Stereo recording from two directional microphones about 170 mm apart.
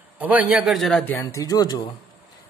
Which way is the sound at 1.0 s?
15° left (ahead or behind).